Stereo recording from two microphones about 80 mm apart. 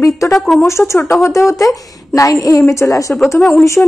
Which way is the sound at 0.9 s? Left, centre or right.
Left.